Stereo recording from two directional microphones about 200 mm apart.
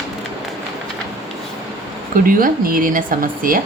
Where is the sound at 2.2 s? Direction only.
45° right (ahead or behind).